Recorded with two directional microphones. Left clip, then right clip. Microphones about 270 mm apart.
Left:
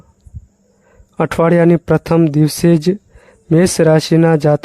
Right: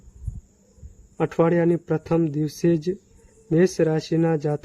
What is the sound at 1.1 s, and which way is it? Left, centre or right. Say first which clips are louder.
Speech: left 8 dB; left.